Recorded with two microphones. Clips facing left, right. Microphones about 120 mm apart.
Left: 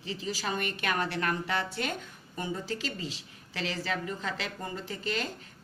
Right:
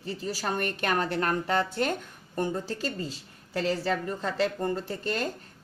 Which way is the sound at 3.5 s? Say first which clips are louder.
Right 6 dB; 45° right (ahead or behind).